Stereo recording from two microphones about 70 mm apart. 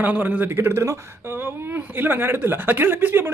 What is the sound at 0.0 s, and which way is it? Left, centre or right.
A man's voice, right.